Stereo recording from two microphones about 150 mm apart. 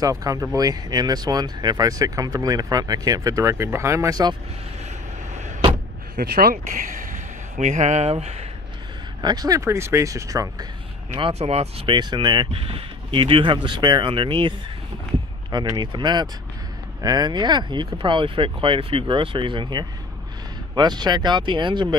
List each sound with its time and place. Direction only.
0.0 s speech: 20° right (ahead or behind)
6.1 s speech: 80° right; by 8.5 s 45° right (ahead or behind)
9.2 s speech: 25° right (ahead or behind)
11.1 s speech: 40° right (ahead or behind)
15.5 s speech: 30° right (ahead or behind)